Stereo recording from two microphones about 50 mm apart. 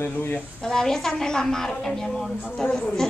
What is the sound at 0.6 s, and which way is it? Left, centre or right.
A woman's voice, centre.